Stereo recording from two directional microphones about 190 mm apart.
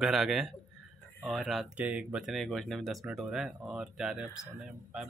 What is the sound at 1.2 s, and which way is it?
Speech, centre (ahead or behind).